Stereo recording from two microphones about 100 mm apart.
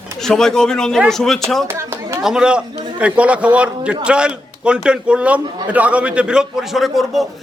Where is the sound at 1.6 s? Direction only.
25° right (ahead or behind).